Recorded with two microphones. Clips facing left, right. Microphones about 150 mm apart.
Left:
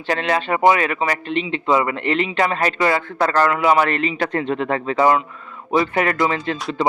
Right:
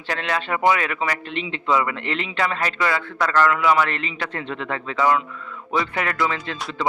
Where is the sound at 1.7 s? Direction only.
45° left (ahead or behind).